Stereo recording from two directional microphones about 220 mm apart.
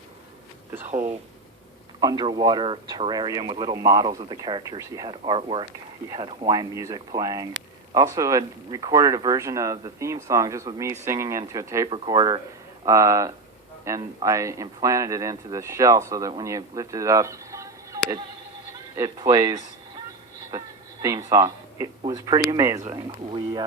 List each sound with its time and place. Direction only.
2.0 s speech: 20° right (ahead or behind)
21.2 s speech: 15° right (ahead or behind)
22.8 s speech: 25° right (ahead or behind)